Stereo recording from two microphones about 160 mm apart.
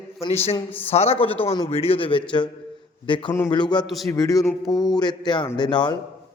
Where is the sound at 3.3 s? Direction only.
15° left (ahead or behind).